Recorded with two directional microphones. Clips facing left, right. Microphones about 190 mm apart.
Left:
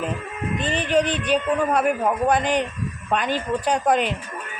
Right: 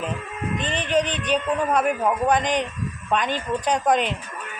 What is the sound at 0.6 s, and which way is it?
A man's voice, 10° left (ahead or behind).